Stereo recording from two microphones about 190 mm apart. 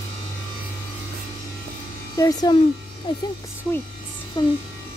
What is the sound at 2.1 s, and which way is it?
Speech, 20° left (ahead or behind).